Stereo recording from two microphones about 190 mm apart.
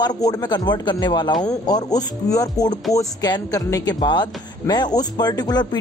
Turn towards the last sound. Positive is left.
turn(degrees=20)  # may be behind; listen again after turning